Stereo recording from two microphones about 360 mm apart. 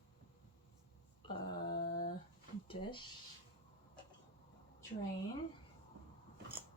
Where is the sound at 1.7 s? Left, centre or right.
Left.